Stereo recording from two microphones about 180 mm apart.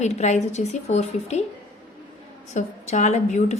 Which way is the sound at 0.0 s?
40° left (ahead or behind).